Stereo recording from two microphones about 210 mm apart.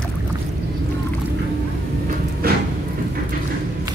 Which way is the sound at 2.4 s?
45° right (ahead or behind).